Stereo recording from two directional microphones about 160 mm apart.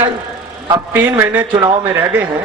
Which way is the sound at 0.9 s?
15° right (ahead or behind).